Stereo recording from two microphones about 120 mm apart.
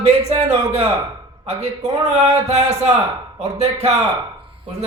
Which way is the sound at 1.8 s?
60° right (ahead or behind).